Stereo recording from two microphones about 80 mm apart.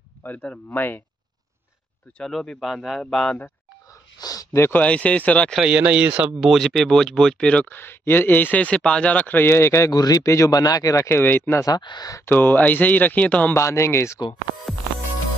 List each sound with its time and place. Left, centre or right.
0.2 s speech: centre
2.1 s a man's voice: centre
4.2 s a sound: left
4.7 s speech: centre
5.6 s speech: centre
6.4 s speech: centre
7.7 s speech: left
9.9 s speech: left
11.1 s speech: left
11.8 s speech: left
12.3 s speech: left
13.5 s speech: left
14.7 s music: centre